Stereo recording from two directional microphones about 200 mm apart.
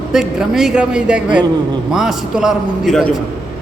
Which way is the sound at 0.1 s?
5° right (ahead or behind).